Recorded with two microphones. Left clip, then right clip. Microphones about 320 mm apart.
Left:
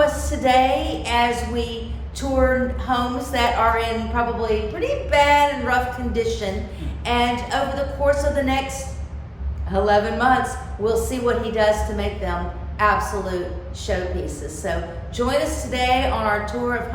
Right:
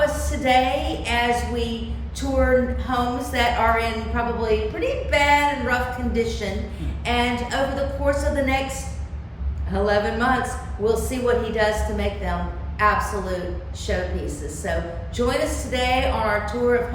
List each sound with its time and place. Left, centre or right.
0.0 s a woman's voice: centre
9.7 s a woman's voice: centre